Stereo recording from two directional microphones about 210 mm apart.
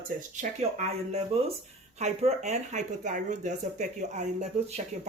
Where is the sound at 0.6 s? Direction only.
30° right (ahead or behind).